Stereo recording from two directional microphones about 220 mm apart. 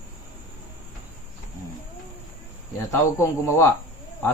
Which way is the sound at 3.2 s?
10° left (ahead or behind).